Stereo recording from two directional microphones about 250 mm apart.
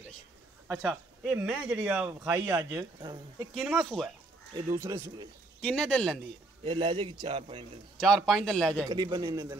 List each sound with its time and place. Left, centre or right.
0.7 s speech: centre
3.5 s speech: centre
4.6 s speech: centre
5.6 s speech: centre
6.6 s a man's voice: centre
8.3 s speech: centre
8.8 s speech: centre